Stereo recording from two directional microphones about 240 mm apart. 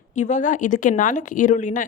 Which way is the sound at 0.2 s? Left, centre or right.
Left.